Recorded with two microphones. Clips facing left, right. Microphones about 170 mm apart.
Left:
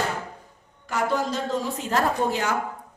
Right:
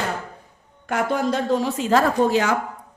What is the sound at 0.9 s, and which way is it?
A woman's voice, 55° right (ahead or behind).